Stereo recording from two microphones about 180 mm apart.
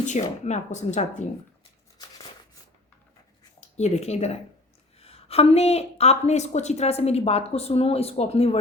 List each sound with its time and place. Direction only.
0.0 s a woman's voice: 40° left (ahead or behind)
2.0 s shuffling cards: 25° left (ahead or behind)
3.8 s a woman's voice: 40° left (ahead or behind)